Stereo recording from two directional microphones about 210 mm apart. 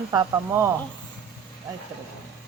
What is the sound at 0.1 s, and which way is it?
Speech, 15° right (ahead or behind).